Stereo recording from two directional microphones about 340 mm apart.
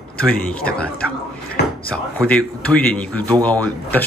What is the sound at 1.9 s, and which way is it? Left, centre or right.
Speech, centre.